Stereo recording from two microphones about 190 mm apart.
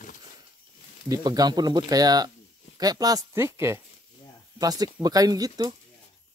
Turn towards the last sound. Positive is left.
turn(degrees=-20)  # may be behind; listen again after turning